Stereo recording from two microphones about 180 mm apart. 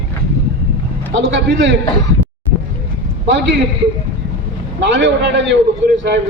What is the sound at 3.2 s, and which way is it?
Speech, 80° right.